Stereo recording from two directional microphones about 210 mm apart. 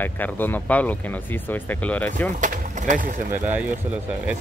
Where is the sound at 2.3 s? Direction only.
35° right (ahead or behind).